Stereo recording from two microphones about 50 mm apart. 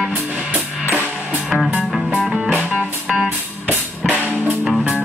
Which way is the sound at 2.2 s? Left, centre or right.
Centre.